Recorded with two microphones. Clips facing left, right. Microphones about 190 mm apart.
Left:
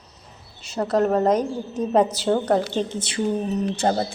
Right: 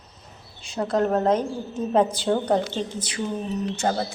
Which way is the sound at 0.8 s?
10° left (ahead or behind).